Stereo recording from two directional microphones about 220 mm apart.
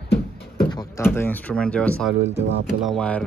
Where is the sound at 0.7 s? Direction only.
15° left (ahead or behind).